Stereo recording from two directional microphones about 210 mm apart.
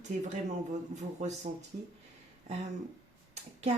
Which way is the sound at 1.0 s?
35° right (ahead or behind).